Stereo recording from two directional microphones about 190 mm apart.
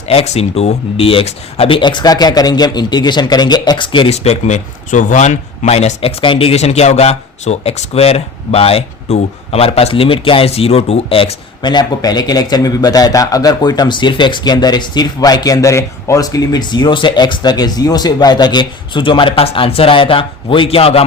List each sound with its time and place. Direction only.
0.1 s speech: 30° left (ahead or behind)